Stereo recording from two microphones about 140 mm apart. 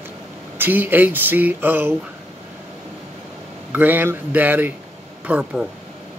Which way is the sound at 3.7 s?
15° right (ahead or behind).